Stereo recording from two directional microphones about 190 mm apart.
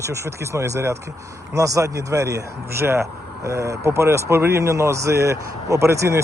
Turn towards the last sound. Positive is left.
turn(degrees=-15)  # may be behind; listen again after turning